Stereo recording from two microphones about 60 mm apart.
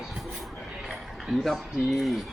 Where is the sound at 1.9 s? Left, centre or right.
Centre.